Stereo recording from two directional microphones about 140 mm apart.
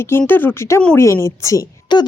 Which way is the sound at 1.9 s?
30° left (ahead or behind).